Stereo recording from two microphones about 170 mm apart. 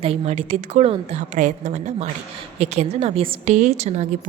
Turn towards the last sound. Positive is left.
turn(degrees=-40)  # may be behind; listen again after turning